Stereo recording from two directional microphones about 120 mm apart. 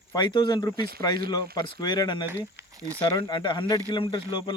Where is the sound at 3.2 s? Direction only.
40° left (ahead or behind).